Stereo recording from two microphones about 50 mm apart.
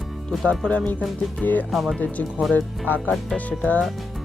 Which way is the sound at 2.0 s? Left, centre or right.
Left.